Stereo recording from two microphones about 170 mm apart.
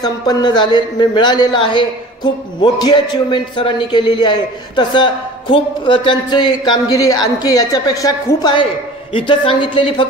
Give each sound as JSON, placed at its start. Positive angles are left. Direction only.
{"t": 0.0, "sound": "a man's voice", "side_deg": 25}